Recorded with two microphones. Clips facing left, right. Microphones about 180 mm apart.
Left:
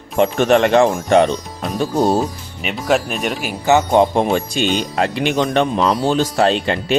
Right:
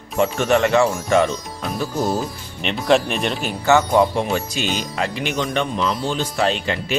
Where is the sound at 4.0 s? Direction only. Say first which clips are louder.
Left 4 dB; 50° left (ahead or behind).